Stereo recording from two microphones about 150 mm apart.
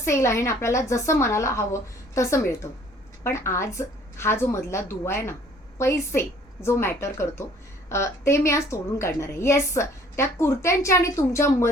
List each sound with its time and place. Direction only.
0.0 s a woman's voice: 20° left (ahead or behind)